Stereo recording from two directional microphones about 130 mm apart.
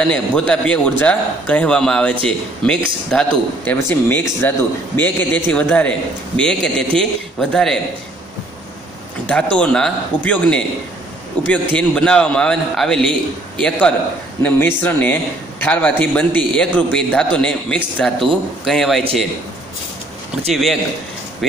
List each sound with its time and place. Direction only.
0.0 s a man's voice: 10° left (ahead or behind)
3.7 s a man's voice: 15° left (ahead or behind)
9.2 s a man's voice: 10° left (ahead or behind)